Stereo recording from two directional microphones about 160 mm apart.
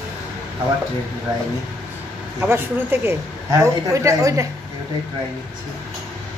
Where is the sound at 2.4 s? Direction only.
15° right (ahead or behind).